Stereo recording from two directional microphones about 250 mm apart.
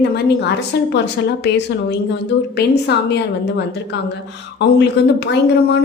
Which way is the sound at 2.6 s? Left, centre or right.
Left.